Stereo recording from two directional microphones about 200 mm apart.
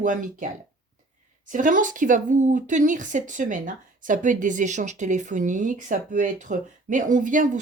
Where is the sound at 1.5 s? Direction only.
40° right (ahead or behind).